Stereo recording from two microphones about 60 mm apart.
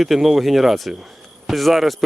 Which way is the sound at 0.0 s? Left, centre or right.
Centre.